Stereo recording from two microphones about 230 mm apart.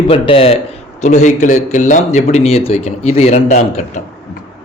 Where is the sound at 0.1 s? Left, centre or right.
Left.